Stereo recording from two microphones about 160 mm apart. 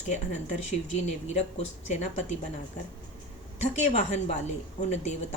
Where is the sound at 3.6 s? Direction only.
45° left (ahead or behind).